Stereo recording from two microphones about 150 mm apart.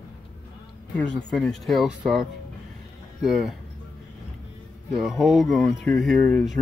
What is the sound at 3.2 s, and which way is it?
Speech, centre (ahead or behind).